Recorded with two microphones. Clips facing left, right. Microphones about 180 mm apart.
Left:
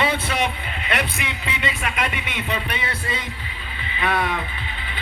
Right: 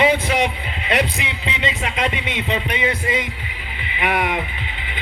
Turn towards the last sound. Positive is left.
turn(degrees=-15)  # may be behind; listen again after turning